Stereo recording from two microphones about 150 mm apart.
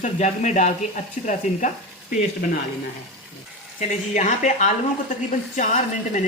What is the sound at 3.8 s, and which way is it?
Speech, 50° left (ahead or behind).